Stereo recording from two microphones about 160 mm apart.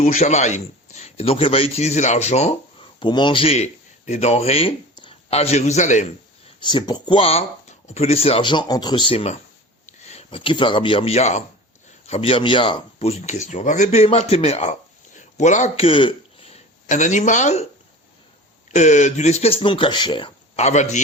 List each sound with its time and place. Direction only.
0.0 s a man's voice: 50° left (ahead or behind)
6.6 s speech: 30° left (ahead or behind)
9.8 s a sound: 45° left (ahead or behind)
10.2 s speech: 30° left (ahead or behind)
18.7 s speech: 45° left (ahead or behind); by 20.3 s 30° left (ahead or behind)
20.6 s a man's voice: 45° left (ahead or behind)